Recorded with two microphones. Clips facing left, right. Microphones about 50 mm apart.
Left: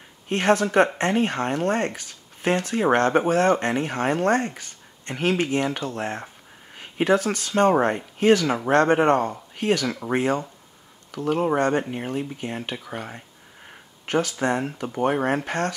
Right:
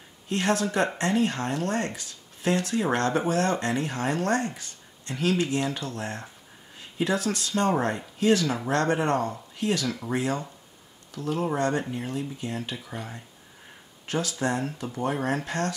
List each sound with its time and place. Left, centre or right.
0.3 s speech: left
5.9 s speech: left
6.7 s a sound: left
7.2 s speech: left